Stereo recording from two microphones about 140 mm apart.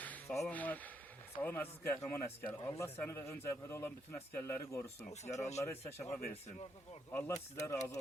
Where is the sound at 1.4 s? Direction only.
10° left (ahead or behind).